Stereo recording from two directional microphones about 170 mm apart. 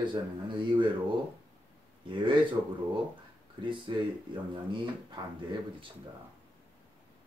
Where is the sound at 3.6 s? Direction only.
30° right (ahead or behind).